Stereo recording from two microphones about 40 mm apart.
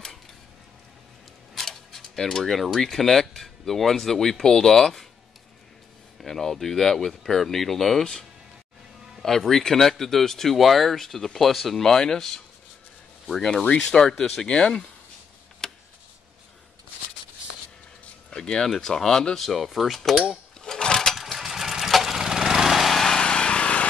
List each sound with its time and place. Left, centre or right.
1.5 s speech: centre
6.2 s speech: centre
15.6 s tick: centre
18.3 s speech: centre
20.6 s a sound: centre
21.2 s lawn mower: centre
23.2 s lawn mower: left